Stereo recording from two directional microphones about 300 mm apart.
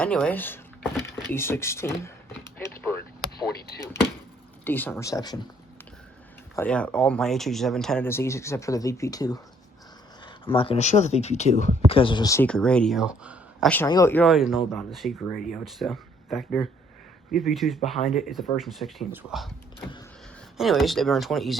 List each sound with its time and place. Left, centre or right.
0.0 s speech: centre
2.6 s a sound: centre
4.6 s speech: centre
6.6 s speech: centre
20.6 s speech: centre